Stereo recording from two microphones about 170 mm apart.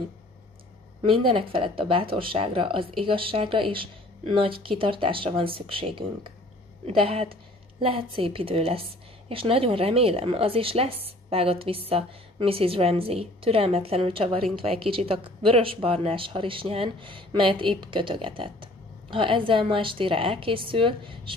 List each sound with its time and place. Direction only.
1.0 s speech: 30° right (ahead or behind)